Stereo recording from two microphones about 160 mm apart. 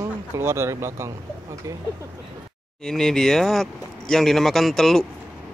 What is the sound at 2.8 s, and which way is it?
Speech, centre (ahead or behind).